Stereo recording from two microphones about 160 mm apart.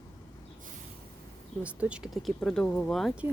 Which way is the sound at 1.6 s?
10° right (ahead or behind).